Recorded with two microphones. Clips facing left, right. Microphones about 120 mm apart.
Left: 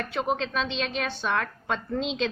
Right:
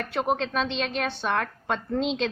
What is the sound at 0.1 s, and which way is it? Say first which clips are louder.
A woman's voice: right 3 dB; 50° right (ahead or behind).